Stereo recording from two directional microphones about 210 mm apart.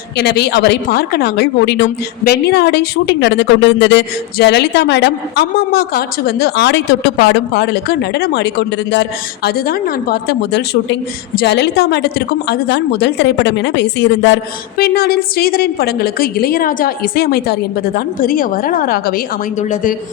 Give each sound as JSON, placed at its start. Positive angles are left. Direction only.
{"t": 0.2, "sound": "a woman's voice", "side_deg": 50}
{"t": 14.8, "sound": "a woman's voice", "side_deg": 45}